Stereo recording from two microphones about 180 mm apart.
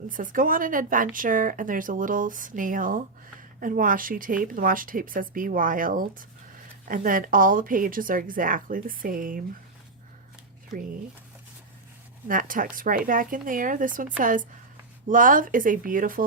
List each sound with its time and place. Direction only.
0.1 s a woman's voice: 50° right (ahead or behind)
12.3 s a woman's voice: 50° right (ahead or behind)